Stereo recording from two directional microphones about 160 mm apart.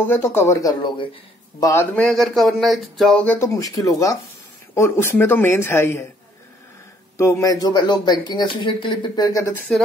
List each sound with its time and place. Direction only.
0.0 s speech: 10° left (ahead or behind)
7.2 s speech: 20° left (ahead or behind)